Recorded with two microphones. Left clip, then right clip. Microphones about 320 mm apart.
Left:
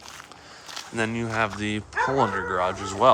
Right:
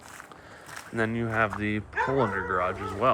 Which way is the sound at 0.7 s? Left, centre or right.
Centre.